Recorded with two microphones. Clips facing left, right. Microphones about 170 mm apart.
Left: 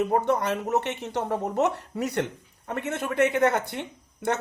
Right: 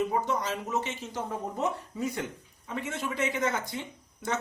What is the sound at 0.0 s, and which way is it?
Speech, 65° left (ahead or behind).